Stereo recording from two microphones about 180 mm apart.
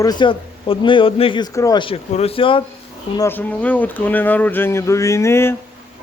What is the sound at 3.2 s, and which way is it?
Speech, 10° left (ahead or behind).